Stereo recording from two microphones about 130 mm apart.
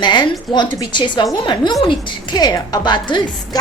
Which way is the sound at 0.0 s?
35° left (ahead or behind).